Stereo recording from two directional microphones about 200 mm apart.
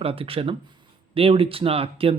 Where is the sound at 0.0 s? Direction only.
30° right (ahead or behind).